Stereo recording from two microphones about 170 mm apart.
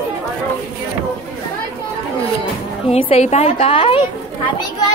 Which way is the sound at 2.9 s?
35° left (ahead or behind).